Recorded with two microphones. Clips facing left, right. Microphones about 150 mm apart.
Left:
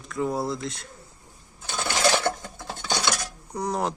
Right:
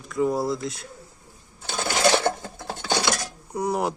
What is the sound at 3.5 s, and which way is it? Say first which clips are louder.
Speech: right 2 dB; 10° right (ahead or behind).